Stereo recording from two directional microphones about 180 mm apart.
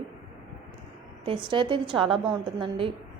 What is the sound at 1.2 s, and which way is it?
A woman's voice, 25° right (ahead or behind).